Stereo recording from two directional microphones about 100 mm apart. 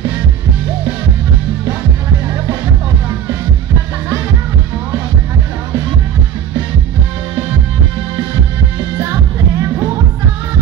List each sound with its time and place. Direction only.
8.9 s music: 30° right (ahead or behind)